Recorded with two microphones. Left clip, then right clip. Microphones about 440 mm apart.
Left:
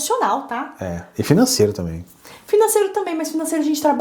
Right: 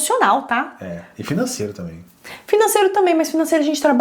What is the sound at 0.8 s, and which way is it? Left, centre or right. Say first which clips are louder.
Speech: left 5 dB; left.